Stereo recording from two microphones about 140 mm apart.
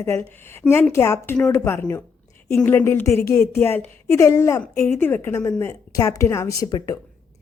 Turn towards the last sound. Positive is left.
turn(degrees=25)  # may be behind; listen again after turning